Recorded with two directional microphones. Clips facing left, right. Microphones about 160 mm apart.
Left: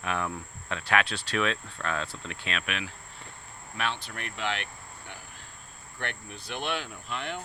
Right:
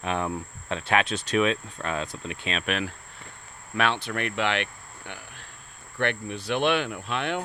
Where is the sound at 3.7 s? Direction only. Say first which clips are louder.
Right 8 dB; 70° right (ahead or behind).